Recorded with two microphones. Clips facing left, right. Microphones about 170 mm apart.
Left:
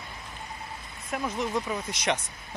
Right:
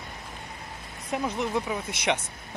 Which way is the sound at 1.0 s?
15° right (ahead or behind).